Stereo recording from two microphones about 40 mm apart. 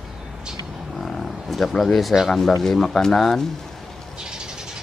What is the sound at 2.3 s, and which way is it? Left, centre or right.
Speech, centre.